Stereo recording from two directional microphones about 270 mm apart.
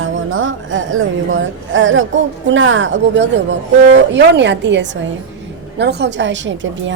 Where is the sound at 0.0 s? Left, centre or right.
Right.